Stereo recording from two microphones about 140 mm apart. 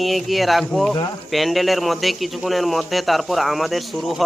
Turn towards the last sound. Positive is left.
turn(degrees=0)  # may be behind; listen again after turning